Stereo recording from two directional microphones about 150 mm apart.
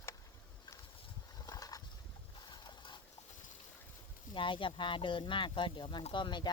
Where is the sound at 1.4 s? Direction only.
25° left (ahead or behind).